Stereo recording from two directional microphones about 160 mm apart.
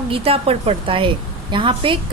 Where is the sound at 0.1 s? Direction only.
35° right (ahead or behind).